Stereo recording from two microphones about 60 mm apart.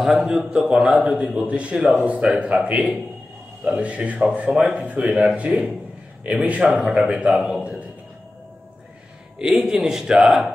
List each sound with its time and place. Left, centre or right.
0.0 s a man's voice: centre
0.5 s a man's voice: centre
9.4 s a man's voice: centre